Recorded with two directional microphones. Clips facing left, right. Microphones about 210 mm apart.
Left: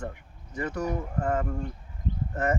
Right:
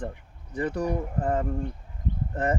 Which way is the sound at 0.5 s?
35° right (ahead or behind).